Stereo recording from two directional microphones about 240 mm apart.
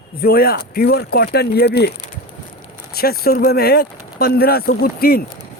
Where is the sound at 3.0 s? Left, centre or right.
Left.